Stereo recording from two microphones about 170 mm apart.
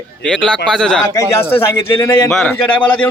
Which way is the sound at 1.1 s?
15° left (ahead or behind).